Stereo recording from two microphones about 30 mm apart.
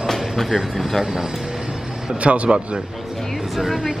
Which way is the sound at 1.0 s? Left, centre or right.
Right.